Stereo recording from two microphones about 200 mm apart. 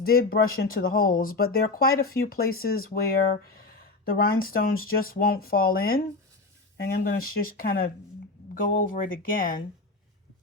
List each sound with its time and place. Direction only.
0.0 s speech: 50° left (ahead or behind)